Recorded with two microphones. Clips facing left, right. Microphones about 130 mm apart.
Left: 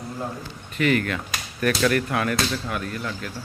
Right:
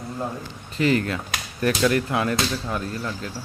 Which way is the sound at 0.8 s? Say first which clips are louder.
Right 1 dB; 30° right (ahead or behind).